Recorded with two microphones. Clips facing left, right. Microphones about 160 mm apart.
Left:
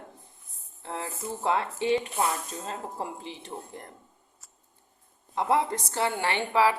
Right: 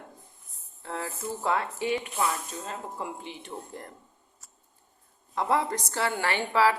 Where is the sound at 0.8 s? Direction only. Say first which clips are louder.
Even; 20° left (ahead or behind).